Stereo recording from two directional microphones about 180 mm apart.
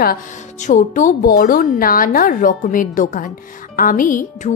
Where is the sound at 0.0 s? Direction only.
50° left (ahead or behind).